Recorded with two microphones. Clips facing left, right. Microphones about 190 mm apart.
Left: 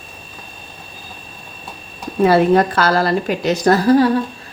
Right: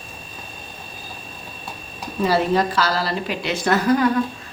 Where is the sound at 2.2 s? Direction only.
60° left (ahead or behind); by 4.0 s 35° left (ahead or behind).